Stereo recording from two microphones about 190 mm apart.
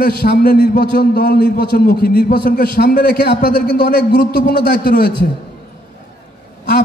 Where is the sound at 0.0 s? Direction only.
50° left (ahead or behind).